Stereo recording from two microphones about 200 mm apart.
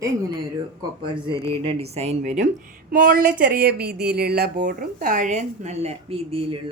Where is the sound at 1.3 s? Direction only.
25° right (ahead or behind).